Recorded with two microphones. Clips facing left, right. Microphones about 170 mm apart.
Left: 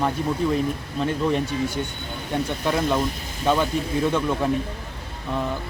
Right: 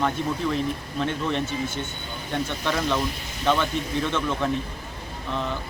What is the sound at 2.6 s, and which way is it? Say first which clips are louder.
Speech: left 3 dB; 5° left (ahead or behind).